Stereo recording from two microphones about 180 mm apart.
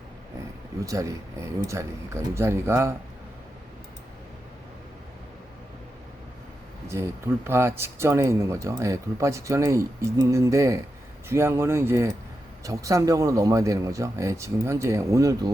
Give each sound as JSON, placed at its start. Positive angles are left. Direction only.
{"t": 0.9, "sound": "speech", "side_deg": -15}
{"t": 6.8, "sound": "speech", "side_deg": -15}